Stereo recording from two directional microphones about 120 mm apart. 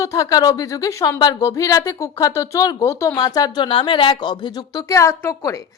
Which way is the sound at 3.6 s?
45° left (ahead or behind).